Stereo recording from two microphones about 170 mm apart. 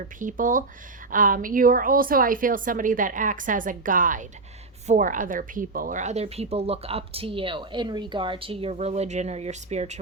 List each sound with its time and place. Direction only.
0.0 s a woman's voice: 50° right (ahead or behind)